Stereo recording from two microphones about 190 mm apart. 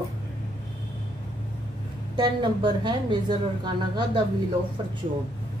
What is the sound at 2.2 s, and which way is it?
A woman's voice, 25° right (ahead or behind).